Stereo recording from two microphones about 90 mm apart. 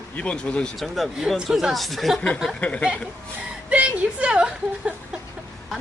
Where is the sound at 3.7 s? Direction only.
10° right (ahead or behind).